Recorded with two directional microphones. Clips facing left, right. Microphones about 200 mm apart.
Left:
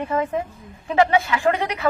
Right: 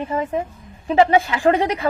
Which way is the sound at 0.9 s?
30° right (ahead or behind).